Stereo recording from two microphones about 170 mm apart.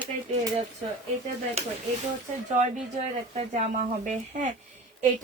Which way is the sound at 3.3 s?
40° right (ahead or behind).